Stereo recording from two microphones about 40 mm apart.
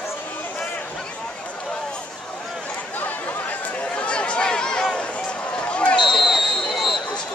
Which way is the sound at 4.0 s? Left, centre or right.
Left.